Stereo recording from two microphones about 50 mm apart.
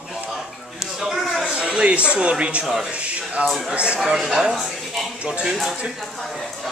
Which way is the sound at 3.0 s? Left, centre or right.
Right.